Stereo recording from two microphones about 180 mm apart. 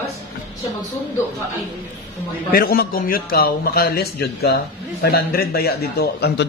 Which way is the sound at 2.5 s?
60° left (ahead or behind).